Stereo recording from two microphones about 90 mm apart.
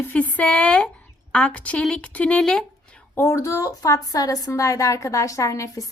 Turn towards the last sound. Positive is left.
turn(degrees=35)  # may be behind; listen again after turning